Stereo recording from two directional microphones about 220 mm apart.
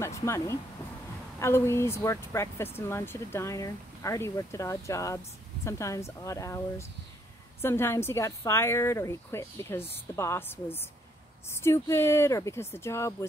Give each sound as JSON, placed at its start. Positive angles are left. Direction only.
{"t": 0.0, "sound": "speech", "side_deg": 15}